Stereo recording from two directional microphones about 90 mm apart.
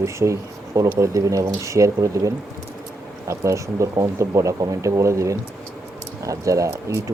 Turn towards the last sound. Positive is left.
turn(degrees=-35)  # may be behind; listen again after turning